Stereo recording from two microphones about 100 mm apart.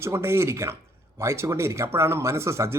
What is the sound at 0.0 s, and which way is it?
Speech, 25° right (ahead or behind).